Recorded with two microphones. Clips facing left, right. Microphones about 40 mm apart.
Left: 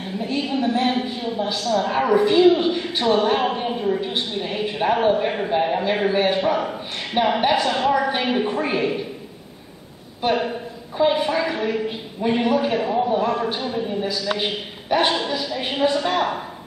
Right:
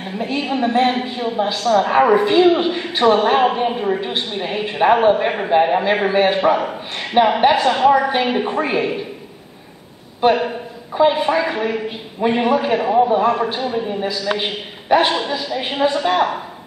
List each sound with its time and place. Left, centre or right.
0.2 s a woman's voice: right
10.2 s a woman's voice: right
11.0 s a woman's voice: right